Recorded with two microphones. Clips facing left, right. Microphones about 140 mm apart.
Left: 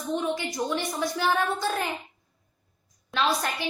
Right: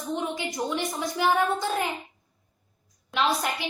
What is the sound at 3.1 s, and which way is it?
Speech, 15° right (ahead or behind).